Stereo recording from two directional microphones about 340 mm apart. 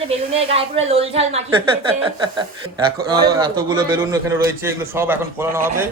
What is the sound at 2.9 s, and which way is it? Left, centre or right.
A man's voice, centre.